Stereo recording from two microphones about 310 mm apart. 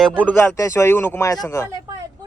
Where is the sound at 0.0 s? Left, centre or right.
Centre.